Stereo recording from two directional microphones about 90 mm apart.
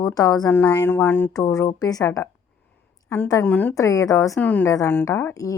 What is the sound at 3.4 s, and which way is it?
Speech, 20° left (ahead or behind).